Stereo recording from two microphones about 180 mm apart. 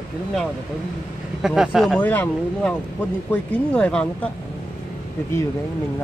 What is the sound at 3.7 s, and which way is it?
Speech, 5° left (ahead or behind).